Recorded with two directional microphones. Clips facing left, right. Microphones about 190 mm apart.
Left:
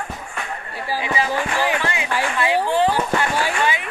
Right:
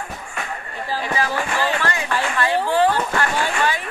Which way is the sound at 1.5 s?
15° left (ahead or behind).